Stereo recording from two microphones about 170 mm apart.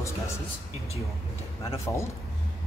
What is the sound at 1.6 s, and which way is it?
Speech, 15° left (ahead or behind).